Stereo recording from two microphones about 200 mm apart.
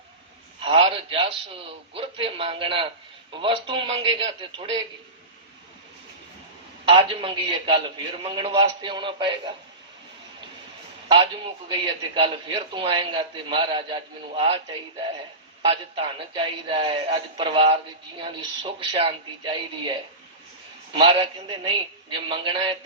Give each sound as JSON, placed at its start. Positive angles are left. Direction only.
{"t": 0.6, "sound": "a man's voice", "side_deg": -25}
{"t": 6.8, "sound": "a man's voice", "side_deg": -25}
{"t": 11.8, "sound": "a man's voice", "side_deg": -25}
{"t": 15.6, "sound": "a man's voice", "side_deg": -30}
{"t": 20.9, "sound": "a man's voice", "side_deg": -25}